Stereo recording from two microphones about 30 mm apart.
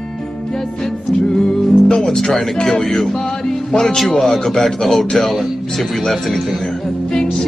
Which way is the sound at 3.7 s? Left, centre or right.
Centre.